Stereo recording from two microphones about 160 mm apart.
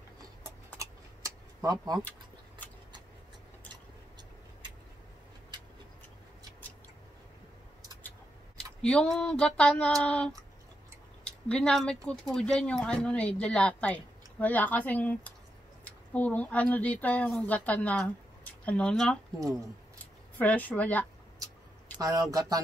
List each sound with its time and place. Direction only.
0.7 s keys jangling: 20° right (ahead or behind)
8.8 s a woman's voice: 5° left (ahead or behind)
20.3 s a woman's voice: 10° left (ahead or behind)
21.9 s speech: 20° right (ahead or behind)